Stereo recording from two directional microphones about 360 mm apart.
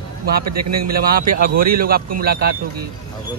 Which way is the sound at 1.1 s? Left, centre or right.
Right.